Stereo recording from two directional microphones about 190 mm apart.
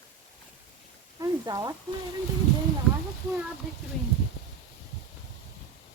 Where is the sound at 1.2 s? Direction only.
20° right (ahead or behind).